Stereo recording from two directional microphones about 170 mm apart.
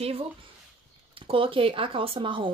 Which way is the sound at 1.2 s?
30° right (ahead or behind).